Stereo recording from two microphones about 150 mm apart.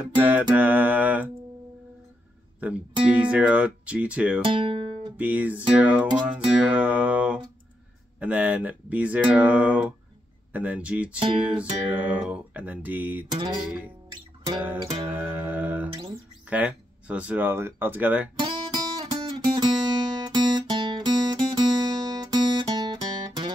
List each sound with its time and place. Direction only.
0.2 s music: 10° right (ahead or behind)
2.6 s music: 10° right (ahead or behind)
4.4 s speech: 35° right (ahead or behind)
5.1 s music: 10° right (ahead or behind)
13.3 s music: 30° right (ahead or behind)
14.6 s music: 10° right (ahead or behind)
16.4 s speech: 10° right (ahead or behind)
18.3 s music: 30° right (ahead or behind)
20.2 s guitar: 30° right (ahead or behind)